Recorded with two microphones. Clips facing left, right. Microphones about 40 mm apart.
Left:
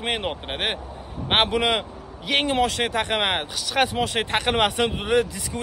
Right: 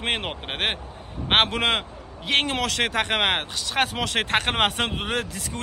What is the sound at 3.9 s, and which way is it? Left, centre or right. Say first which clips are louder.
Speech: left 1 dB; right.